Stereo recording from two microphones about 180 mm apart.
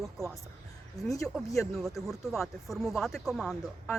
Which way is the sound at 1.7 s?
Centre (ahead or behind).